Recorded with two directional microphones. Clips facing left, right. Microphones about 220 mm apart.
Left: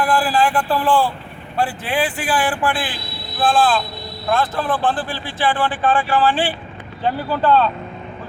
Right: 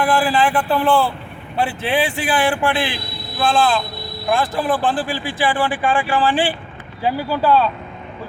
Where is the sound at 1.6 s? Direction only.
25° right (ahead or behind).